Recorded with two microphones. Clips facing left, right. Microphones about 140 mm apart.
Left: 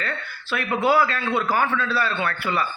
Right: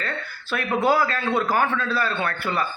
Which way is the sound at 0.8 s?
40° right (ahead or behind).